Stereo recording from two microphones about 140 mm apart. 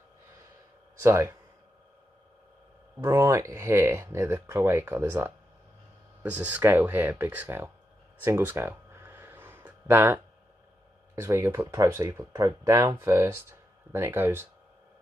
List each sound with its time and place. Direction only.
1.0 s speech: 20° right (ahead or behind)
3.0 s speech: 20° right (ahead or behind)
8.2 s a sound: 15° right (ahead or behind)
11.1 s speech: 20° right (ahead or behind)